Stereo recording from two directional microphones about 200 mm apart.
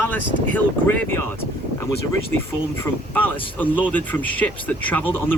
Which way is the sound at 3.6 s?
10° left (ahead or behind).